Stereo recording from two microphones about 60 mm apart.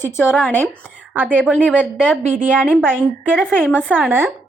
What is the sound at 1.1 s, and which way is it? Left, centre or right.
A woman's voice, right.